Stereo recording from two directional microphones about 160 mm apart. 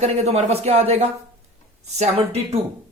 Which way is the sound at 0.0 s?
40° right (ahead or behind).